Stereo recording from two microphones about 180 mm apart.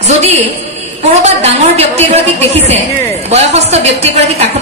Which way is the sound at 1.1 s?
35° right (ahead or behind).